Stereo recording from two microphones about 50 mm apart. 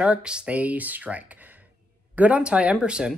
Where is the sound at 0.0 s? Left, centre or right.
Right.